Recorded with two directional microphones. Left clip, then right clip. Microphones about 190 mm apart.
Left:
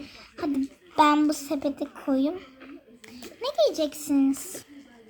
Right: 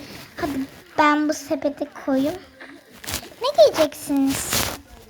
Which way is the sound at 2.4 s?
5° right (ahead or behind).